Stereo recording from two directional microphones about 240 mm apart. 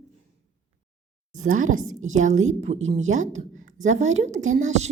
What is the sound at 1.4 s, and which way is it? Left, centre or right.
A woman's voice, right.